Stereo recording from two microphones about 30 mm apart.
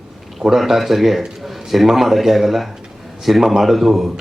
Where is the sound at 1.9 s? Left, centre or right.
Centre.